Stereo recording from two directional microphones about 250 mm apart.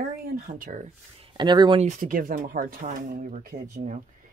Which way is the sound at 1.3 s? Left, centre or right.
Centre.